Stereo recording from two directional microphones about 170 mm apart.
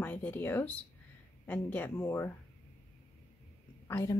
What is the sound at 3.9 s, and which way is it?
Speech, 15° left (ahead or behind).